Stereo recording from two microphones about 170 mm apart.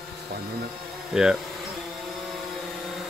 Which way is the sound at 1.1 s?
5° right (ahead or behind).